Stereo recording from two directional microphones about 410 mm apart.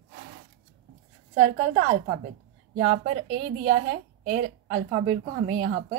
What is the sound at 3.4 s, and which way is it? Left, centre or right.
A woman's voice, centre.